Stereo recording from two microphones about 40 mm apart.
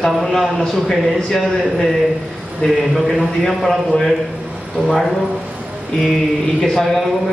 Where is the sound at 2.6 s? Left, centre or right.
Left.